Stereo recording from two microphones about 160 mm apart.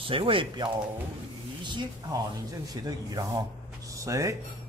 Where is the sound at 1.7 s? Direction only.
25° right (ahead or behind).